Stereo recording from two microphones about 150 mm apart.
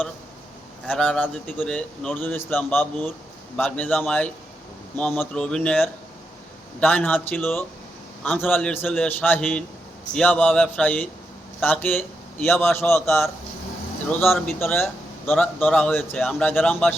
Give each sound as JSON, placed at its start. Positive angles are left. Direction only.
{"t": 0.9, "sound": "a man's voice", "side_deg": 5}
{"t": 14.2, "sound": "speech", "side_deg": 0}
{"t": 14.6, "sound": "a man's voice", "side_deg": 15}